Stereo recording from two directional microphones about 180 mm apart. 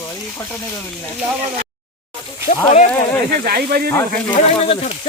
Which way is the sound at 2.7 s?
40° left (ahead or behind).